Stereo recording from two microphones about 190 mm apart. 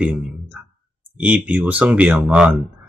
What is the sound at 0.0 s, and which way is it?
Speech, 5° right (ahead or behind).